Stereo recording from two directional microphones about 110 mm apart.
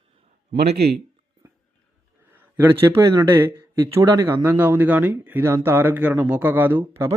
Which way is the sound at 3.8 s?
35° right (ahead or behind).